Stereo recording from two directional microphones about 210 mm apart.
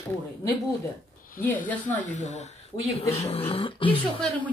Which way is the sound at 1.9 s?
35° left (ahead or behind).